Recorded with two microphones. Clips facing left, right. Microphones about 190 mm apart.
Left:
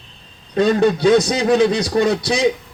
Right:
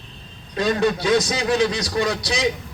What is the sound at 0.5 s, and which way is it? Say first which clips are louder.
A man's voice: left 5 dB; 55° left (ahead or behind).